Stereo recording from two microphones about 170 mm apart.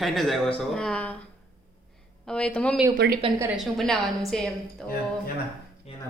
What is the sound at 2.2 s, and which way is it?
Speech, 5° left (ahead or behind).